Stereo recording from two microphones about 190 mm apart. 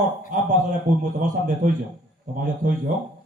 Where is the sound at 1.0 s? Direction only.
45° right (ahead or behind).